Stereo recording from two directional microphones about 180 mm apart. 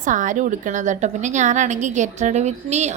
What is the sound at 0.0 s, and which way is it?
A woman's voice, 45° right (ahead or behind).